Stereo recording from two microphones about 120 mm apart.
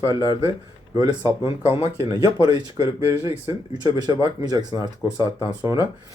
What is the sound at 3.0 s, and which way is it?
Speech, 20° right (ahead or behind).